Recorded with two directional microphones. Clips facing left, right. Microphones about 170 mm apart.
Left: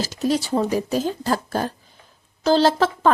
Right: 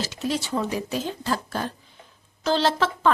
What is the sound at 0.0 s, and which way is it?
A woman's voice, 40° left (ahead or behind).